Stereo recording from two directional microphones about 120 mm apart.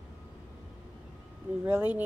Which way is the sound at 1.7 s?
10° right (ahead or behind).